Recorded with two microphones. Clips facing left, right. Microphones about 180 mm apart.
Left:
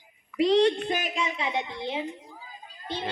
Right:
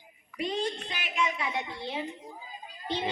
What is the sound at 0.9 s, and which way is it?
Speech, 45° left (ahead or behind).